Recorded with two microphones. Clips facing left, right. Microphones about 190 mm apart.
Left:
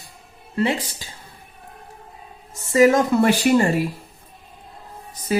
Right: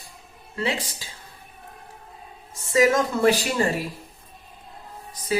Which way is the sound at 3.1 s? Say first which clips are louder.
Left 4 dB; 65° left (ahead or behind).